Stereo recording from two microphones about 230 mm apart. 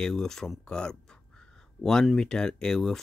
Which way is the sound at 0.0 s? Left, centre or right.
Centre.